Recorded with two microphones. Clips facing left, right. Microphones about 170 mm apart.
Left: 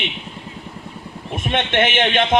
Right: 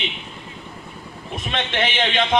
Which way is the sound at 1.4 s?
55° left (ahead or behind).